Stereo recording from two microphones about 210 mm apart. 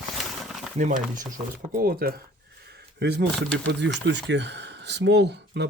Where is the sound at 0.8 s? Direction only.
40° right (ahead or behind).